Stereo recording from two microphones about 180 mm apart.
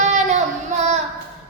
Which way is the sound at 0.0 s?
40° right (ahead or behind).